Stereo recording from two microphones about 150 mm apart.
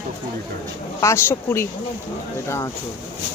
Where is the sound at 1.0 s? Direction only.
20° left (ahead or behind).